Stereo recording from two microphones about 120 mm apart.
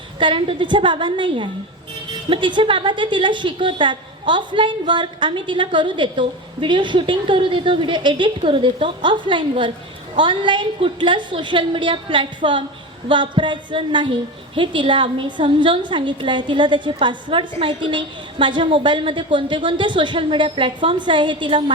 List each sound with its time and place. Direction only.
0.2 s a woman's voice: 45° right (ahead or behind)